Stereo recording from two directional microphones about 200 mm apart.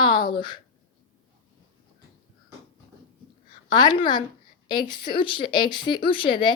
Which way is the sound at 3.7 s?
20° left (ahead or behind).